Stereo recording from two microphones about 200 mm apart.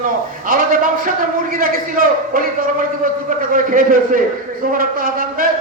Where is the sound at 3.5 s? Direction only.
45° right (ahead or behind).